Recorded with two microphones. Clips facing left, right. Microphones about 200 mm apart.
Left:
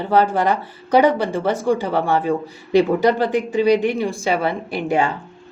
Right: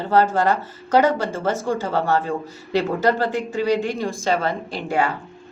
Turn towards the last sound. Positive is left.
turn(degrees=20)  # may be behind; listen again after turning